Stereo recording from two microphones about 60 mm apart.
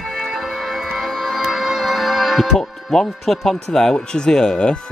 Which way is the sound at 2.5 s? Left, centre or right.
Centre.